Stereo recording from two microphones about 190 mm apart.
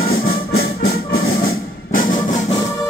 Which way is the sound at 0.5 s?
90° left.